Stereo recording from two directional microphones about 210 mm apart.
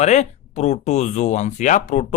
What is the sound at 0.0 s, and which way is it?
Speech, 35° left (ahead or behind).